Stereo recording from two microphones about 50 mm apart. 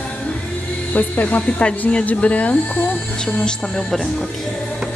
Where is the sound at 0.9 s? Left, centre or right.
Left.